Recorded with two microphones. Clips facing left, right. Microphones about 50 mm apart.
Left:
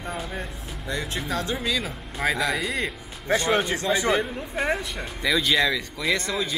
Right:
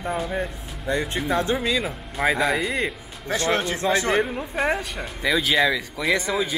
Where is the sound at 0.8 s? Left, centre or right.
Right.